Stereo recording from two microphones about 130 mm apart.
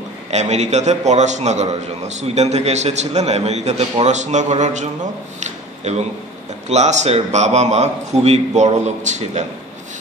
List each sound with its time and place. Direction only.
0.3 s a man's voice: 60° right (ahead or behind)
5.4 s a sound: 60° right (ahead or behind)
6.7 s a man's voice: 60° right (ahead or behind)